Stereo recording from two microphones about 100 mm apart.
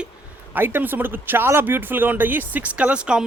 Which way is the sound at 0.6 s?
20° right (ahead or behind).